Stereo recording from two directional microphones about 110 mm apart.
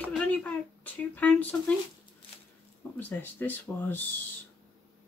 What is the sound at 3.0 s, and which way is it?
Speech, 15° left (ahead or behind).